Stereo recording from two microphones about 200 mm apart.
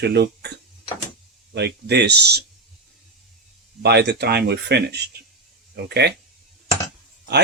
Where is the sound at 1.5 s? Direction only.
55° right (ahead or behind).